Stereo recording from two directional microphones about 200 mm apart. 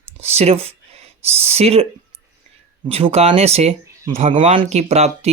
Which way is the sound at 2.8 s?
30° right (ahead or behind).